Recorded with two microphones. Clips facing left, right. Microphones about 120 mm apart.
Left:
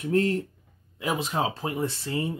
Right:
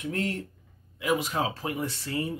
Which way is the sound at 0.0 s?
35° left (ahead or behind).